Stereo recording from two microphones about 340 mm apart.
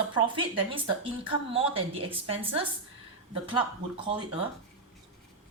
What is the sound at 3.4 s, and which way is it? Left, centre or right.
Speech, centre.